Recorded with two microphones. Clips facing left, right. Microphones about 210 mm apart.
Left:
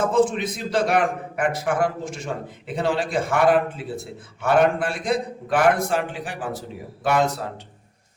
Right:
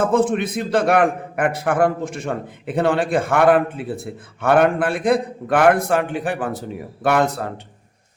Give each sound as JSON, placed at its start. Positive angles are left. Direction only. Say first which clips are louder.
{"t": 0.0, "sound": "a man's voice", "louder": "right 2 dB", "side_deg": -55}